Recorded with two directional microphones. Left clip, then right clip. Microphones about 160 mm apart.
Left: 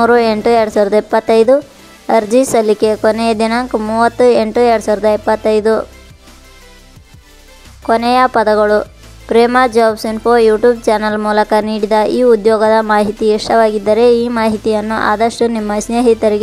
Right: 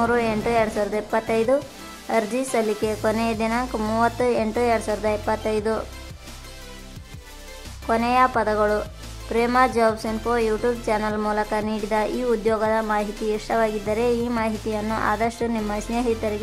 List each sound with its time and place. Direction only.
0.0 s a woman's voice: 40° left (ahead or behind)
7.8 s a woman's voice: 40° left (ahead or behind)